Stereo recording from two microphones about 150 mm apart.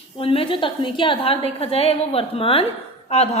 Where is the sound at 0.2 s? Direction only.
40° left (ahead or behind).